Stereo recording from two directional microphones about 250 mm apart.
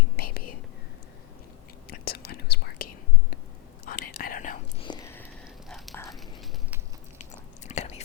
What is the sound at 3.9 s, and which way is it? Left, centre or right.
Whispering, left.